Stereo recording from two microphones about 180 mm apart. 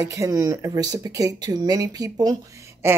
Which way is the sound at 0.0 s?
20° right (ahead or behind).